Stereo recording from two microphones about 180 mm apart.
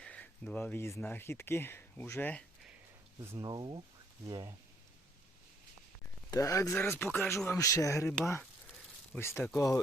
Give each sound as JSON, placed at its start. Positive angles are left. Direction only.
{"t": 0.0, "sound": "speech", "side_deg": 5}
{"t": 3.2, "sound": "speech", "side_deg": -20}
{"t": 6.3, "sound": "speech", "side_deg": 20}
{"t": 9.6, "sound": "speech", "side_deg": 20}